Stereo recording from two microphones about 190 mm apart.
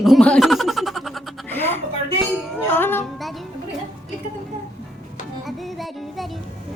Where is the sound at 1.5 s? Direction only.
10° left (ahead or behind).